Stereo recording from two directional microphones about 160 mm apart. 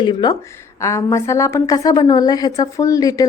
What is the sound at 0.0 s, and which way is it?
A woman's voice, 25° left (ahead or behind).